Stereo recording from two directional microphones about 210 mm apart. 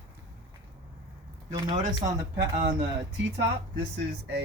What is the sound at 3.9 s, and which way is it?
Speech, 55° right (ahead or behind).